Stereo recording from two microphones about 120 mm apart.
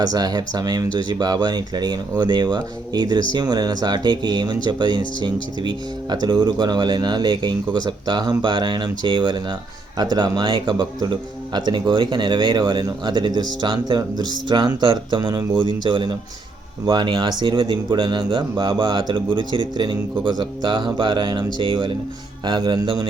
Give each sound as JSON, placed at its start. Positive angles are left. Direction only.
{"t": 0.0, "sound": "speech", "side_deg": -30}